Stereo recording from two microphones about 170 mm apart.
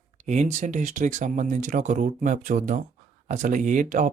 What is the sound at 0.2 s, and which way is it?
Speech, 45° right (ahead or behind).